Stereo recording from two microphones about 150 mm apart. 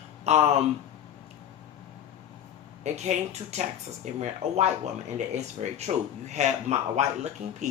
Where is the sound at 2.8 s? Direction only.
50° right (ahead or behind).